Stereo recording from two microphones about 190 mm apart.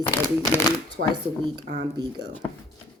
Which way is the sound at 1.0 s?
60° right (ahead or behind).